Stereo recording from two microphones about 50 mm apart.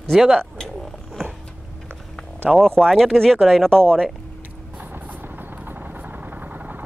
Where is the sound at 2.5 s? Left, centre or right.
Centre.